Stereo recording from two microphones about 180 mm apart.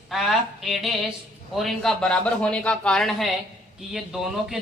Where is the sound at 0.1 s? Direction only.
Centre (ahead or behind).